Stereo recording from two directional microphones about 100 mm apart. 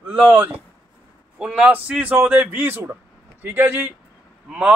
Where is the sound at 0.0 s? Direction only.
15° right (ahead or behind).